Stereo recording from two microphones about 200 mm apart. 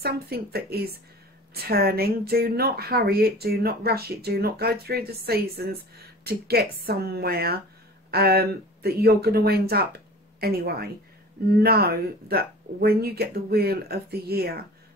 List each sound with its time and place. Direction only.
0.0 s speech: 50° right (ahead or behind)